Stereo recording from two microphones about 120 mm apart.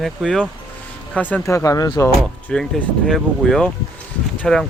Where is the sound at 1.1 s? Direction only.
15° left (ahead or behind).